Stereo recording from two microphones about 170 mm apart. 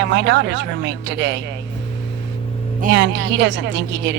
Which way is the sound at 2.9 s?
90° right.